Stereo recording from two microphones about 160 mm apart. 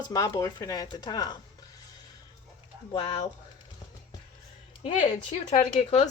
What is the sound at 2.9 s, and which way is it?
Speech, 35° left (ahead or behind).